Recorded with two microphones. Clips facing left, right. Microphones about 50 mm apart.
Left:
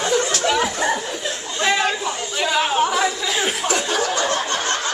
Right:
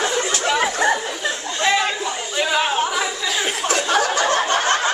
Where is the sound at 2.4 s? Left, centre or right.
Centre.